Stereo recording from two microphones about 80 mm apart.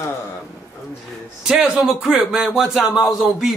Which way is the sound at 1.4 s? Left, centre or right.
Centre.